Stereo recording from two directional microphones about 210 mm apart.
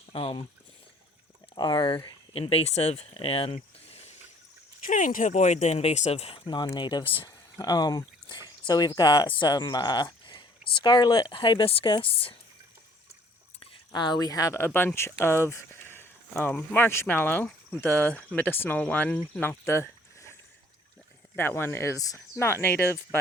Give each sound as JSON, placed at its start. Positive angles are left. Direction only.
{"t": 0.1, "sound": "speech", "side_deg": 25}
{"t": 1.5, "sound": "speech", "side_deg": 20}
{"t": 4.9, "sound": "speech", "side_deg": 40}
{"t": 13.9, "sound": "speech", "side_deg": 20}
{"t": 21.3, "sound": "speech", "side_deg": 10}